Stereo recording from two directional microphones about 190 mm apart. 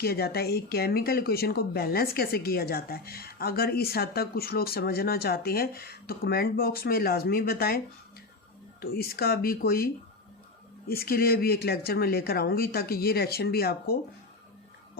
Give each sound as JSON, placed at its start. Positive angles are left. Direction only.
{"t": 0.0, "sound": "speech", "side_deg": 55}
{"t": 8.8, "sound": "speech", "side_deg": 55}